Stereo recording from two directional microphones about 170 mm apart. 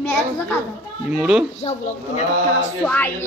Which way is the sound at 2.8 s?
10° left (ahead or behind).